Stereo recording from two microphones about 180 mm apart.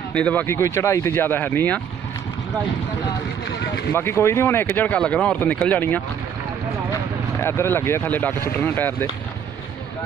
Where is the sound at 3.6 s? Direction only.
65° left (ahead or behind).